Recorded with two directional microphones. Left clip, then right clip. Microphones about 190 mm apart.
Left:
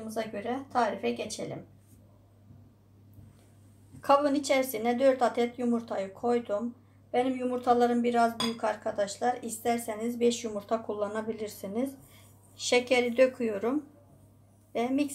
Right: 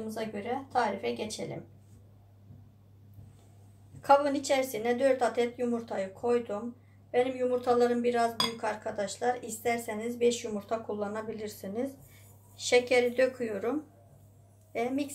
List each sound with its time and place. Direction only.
0.0 s a woman's voice: 30° left (ahead or behind)
4.0 s a woman's voice: 25° left (ahead or behind)